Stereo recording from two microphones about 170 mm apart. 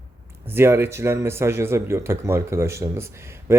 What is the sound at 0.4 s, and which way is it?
Speech, 15° right (ahead or behind).